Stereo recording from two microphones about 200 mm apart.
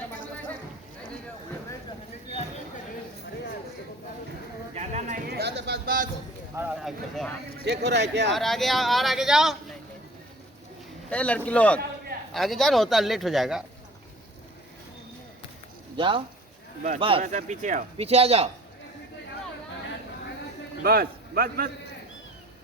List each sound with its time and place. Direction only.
4.7 s a sound: 35° right (ahead or behind)
6.6 s speech: centre (ahead or behind)
7.6 s speech: 55° right (ahead or behind)
8.3 s speech: centre (ahead or behind)
11.1 s speech: 5° left (ahead or behind)
16.0 s speech: 25° right (ahead or behind)
17.2 s speech: 40° right (ahead or behind)
20.8 s a man's voice: 50° right (ahead or behind)